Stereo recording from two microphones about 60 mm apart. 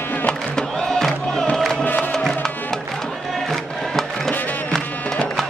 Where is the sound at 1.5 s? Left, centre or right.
Centre.